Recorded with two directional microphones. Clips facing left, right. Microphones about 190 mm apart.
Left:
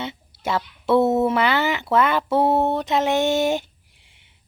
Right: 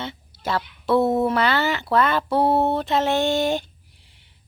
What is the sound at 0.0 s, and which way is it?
Speech, 20° left (ahead or behind).